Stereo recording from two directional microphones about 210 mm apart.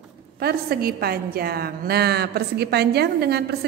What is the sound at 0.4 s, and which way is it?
A woman's voice, 45° right (ahead or behind).